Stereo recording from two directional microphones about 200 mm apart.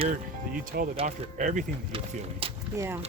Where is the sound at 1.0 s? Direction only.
40° right (ahead or behind).